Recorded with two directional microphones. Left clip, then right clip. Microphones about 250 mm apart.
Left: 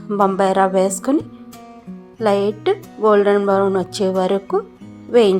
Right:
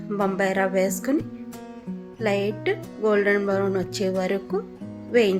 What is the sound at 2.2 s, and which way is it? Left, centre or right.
A woman's voice, centre.